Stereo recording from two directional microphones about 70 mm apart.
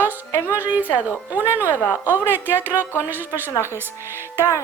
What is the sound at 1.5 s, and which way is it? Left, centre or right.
Speech, left.